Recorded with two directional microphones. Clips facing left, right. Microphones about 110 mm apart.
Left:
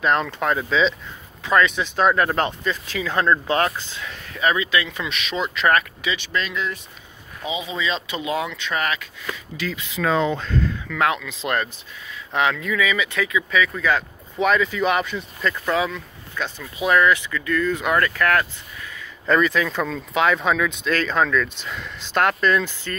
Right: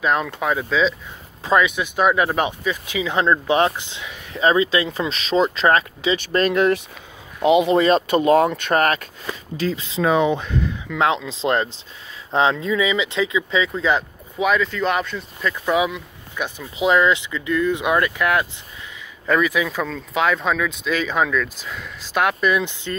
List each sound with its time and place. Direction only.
0.0 s speech: 5° right (ahead or behind); by 6.1 s 30° right (ahead or behind)
6.1 s speech: 45° right (ahead or behind)
9.2 s speech: 30° right (ahead or behind)
10.0 s speech: 15° right (ahead or behind)
14.4 s speech: centre (ahead or behind)
15.6 s speech: 15° right (ahead or behind)
19.2 s speech: 5° right (ahead or behind)